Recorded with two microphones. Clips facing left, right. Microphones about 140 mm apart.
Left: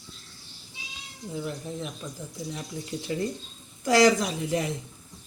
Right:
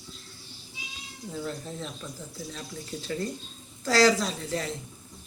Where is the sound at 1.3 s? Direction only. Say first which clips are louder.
Left 2 dB; 15° left (ahead or behind).